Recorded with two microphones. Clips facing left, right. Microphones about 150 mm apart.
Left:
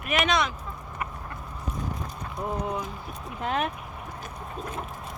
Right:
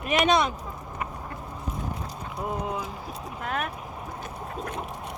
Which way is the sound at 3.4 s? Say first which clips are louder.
Left 3 dB; 30° left (ahead or behind).